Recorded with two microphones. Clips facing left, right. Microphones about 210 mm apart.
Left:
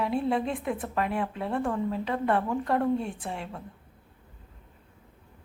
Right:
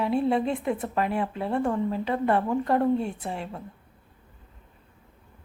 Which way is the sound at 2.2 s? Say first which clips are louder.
Right 3 dB; 25° right (ahead or behind).